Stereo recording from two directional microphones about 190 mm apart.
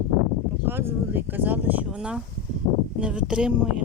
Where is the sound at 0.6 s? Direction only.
10° right (ahead or behind).